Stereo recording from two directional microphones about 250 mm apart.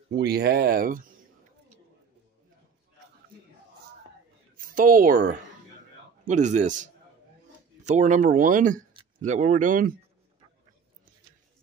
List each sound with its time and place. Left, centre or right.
0.1 s speech: right
4.6 s a man's voice: right